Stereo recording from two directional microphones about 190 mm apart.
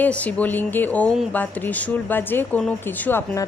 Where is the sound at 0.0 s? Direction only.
5° left (ahead or behind).